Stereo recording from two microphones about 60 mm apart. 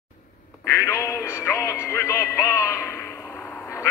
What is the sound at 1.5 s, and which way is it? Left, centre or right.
Music, left.